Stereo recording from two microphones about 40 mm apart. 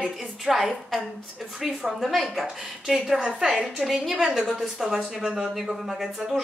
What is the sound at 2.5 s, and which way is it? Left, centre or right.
A woman's voice, centre.